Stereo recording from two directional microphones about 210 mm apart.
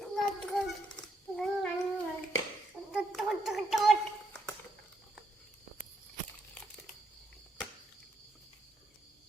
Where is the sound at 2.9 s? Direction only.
Centre (ahead or behind).